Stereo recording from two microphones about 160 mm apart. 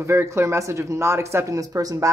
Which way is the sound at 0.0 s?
15° right (ahead or behind).